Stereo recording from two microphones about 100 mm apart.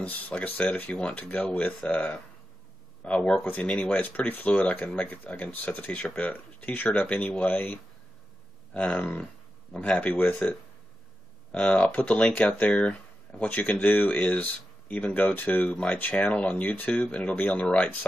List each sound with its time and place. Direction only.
0.0 s speech: 15° left (ahead or behind)
11.5 s speech: 15° left (ahead or behind)